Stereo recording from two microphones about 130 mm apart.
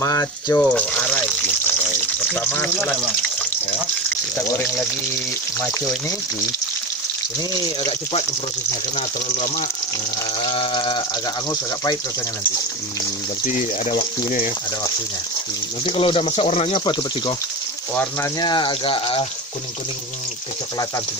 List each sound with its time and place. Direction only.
0.0 s speech: 25° left (ahead or behind)
0.7 s speech: 10° left (ahead or behind)
2.4 s speech: 15° left (ahead or behind)
10.4 s water: 40° left (ahead or behind)
15.8 s speech: 40° left (ahead or behind)
18.4 s speech: 35° left (ahead or behind)